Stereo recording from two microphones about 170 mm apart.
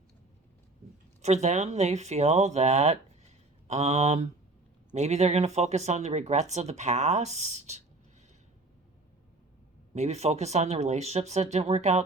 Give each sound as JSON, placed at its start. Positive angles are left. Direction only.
{"t": 1.2, "sound": "speech", "side_deg": -40}
{"t": 9.9, "sound": "speech", "side_deg": -40}